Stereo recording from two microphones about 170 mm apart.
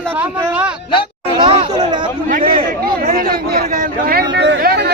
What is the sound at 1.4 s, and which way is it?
Speech, 30° right (ahead or behind).